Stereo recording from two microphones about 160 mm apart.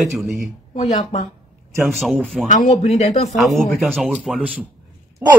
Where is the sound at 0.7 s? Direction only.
40° left (ahead or behind).